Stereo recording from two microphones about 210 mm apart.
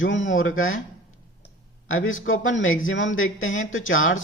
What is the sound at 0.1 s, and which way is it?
Speech, 60° left (ahead or behind).